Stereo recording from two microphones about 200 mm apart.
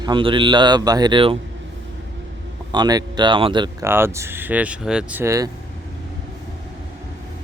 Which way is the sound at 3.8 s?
10° right (ahead or behind).